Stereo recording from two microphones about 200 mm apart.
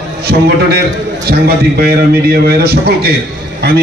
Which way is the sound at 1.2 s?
50° right (ahead or behind).